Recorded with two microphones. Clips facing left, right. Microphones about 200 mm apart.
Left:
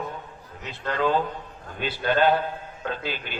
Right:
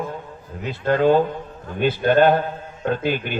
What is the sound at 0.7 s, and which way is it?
A man's voice, 45° right (ahead or behind).